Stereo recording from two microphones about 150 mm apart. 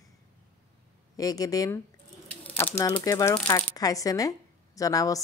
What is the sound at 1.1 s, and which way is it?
Speech, 25° left (ahead or behind).